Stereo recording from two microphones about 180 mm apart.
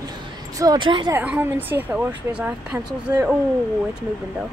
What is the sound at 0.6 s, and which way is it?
Speech, 25° right (ahead or behind).